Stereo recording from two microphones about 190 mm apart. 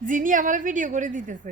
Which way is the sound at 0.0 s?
45° right (ahead or behind).